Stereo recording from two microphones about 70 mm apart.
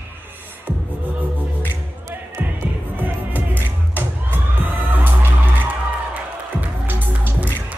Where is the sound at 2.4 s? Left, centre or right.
Right.